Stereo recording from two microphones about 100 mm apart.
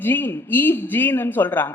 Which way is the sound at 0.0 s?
20° left (ahead or behind).